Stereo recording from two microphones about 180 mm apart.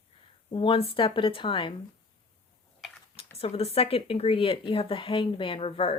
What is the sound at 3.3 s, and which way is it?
Speech, 35° left (ahead or behind).